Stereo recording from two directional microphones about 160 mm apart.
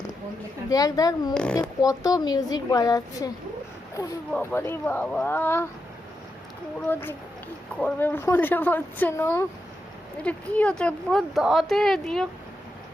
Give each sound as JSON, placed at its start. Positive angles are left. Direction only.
{"t": 0.7, "sound": "a woman's voice", "side_deg": 20}
{"t": 1.3, "sound": "speech", "side_deg": 5}
{"t": 1.8, "sound": "a woman's voice", "side_deg": 20}
{"t": 4.3, "sound": "speech", "side_deg": 10}
{"t": 6.8, "sound": "speech", "side_deg": 15}